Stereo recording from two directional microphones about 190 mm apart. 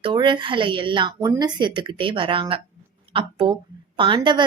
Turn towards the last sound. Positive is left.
turn(degrees=-25)  # may be behind; listen again after turning